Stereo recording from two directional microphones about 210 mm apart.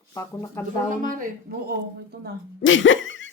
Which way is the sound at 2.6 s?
65° left (ahead or behind).